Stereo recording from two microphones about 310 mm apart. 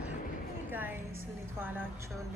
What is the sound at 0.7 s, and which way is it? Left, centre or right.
Music, centre.